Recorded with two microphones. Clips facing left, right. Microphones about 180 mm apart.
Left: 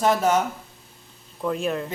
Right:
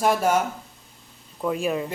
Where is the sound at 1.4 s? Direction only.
5° right (ahead or behind).